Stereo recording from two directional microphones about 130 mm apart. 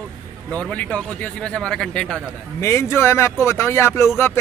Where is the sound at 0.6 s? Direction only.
10° left (ahead or behind).